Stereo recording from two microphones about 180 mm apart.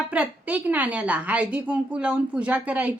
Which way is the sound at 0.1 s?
10° right (ahead or behind).